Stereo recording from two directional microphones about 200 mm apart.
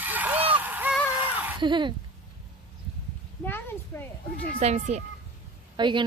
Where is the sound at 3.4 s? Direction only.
10° left (ahead or behind).